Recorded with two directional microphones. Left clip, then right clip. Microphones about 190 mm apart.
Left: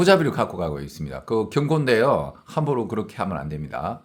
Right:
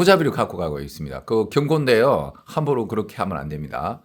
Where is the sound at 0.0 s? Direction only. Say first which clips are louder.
Right 1 dB; 15° right (ahead or behind).